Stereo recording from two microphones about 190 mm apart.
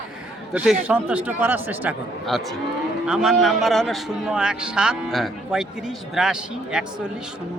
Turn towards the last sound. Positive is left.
turn(degrees=-5)  # may be behind; listen again after turning